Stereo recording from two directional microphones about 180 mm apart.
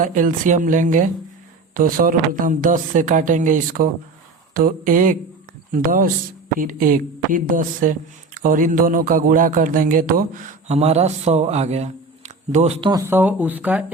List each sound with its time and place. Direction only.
0.0 s a man's voice: 45° right (ahead or behind)
12.9 s speech: 15° right (ahead or behind)